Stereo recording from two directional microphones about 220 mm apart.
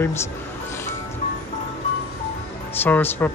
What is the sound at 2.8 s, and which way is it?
Speech, 10° left (ahead or behind).